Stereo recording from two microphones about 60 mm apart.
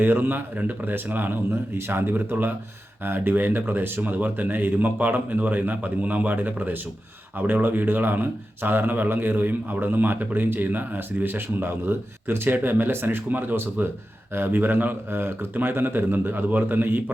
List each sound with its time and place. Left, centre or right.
0.0 s speech: right